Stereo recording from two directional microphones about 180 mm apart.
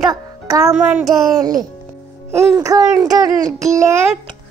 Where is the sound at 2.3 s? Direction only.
15° right (ahead or behind).